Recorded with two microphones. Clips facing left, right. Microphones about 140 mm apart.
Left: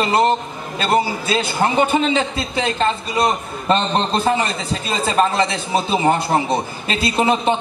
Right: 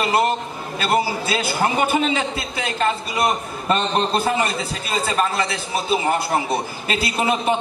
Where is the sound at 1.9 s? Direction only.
25° left (ahead or behind).